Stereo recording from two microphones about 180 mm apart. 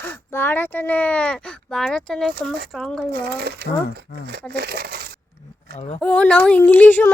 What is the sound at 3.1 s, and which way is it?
Speech, 65° right (ahead or behind).